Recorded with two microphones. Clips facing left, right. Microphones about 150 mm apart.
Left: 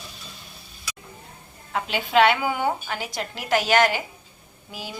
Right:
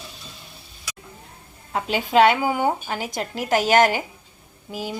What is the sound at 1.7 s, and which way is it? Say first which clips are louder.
Speech: right 2 dB; 40° right (ahead or behind).